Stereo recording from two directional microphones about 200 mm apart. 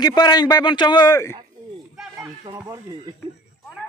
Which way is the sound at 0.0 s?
20° left (ahead or behind).